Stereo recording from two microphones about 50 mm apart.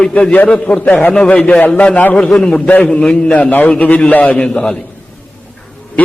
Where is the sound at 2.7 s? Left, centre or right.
Left.